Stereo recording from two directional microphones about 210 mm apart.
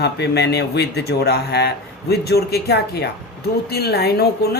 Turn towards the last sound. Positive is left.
turn(degrees=50)  # may be behind; listen again after turning